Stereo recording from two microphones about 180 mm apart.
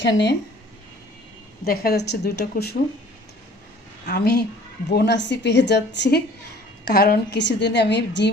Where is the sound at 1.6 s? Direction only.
55° left (ahead or behind).